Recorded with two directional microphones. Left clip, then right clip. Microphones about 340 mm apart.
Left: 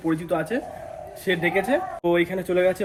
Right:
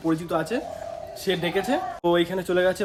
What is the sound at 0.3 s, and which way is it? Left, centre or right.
Speech, centre.